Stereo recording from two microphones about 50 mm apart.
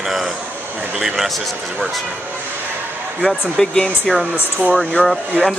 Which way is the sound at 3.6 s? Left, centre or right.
Centre.